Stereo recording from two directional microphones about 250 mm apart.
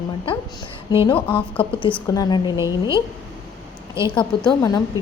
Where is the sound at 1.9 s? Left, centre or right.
Centre.